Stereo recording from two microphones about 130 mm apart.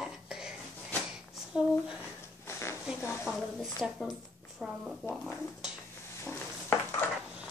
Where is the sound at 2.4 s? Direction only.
20° left (ahead or behind).